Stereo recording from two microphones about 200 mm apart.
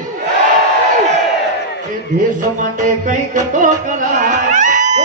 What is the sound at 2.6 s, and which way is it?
Music, 40° right (ahead or behind).